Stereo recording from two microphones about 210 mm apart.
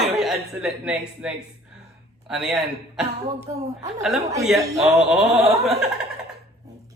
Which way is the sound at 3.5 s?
15° right (ahead or behind).